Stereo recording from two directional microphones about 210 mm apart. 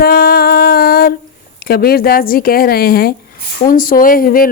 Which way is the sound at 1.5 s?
50° left (ahead or behind).